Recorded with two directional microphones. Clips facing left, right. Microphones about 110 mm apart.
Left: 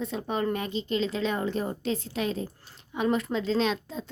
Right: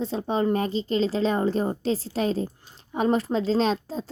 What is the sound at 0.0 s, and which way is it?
A woman's voice, 30° right (ahead or behind).